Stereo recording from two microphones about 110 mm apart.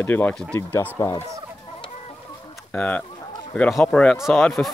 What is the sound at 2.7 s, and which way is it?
Speech, 15° left (ahead or behind).